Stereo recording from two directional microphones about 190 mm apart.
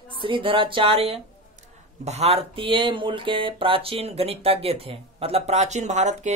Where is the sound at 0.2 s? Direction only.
25° right (ahead or behind).